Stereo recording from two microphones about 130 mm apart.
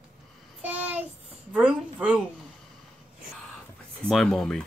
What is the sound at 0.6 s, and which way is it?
Child singing, 10° right (ahead or behind).